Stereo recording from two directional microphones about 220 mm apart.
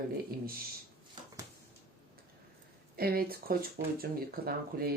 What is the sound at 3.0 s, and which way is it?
Speech, 45° right (ahead or behind).